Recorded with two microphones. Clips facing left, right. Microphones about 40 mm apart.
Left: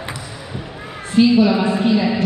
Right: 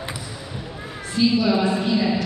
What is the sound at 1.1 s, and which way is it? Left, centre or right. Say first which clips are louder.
A woman's voice: left 6 dB; left.